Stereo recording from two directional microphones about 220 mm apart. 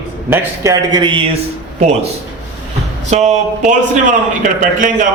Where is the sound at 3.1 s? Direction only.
30° right (ahead or behind).